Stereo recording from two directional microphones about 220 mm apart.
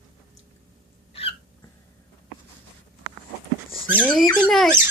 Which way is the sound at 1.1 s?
25° left (ahead or behind).